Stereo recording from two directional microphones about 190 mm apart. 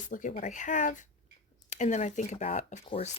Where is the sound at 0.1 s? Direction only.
45° left (ahead or behind).